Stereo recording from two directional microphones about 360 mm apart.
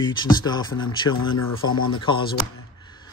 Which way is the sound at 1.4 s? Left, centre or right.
Left.